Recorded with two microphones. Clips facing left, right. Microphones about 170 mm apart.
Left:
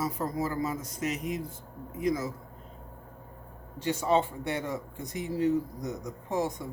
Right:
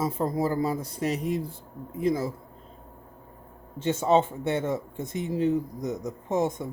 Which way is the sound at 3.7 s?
25° right (ahead or behind).